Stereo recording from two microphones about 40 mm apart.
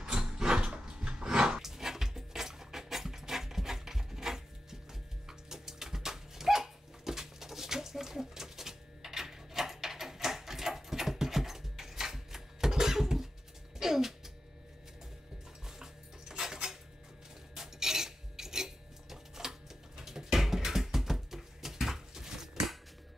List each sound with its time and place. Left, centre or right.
0.0 s a sound: centre
5.3 s dog: centre
13.7 s music: centre
15.6 s dog: centre
17.6 s filing: centre
20.0 s a sound: centre